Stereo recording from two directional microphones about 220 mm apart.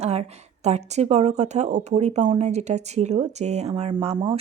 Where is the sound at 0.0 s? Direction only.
30° right (ahead or behind).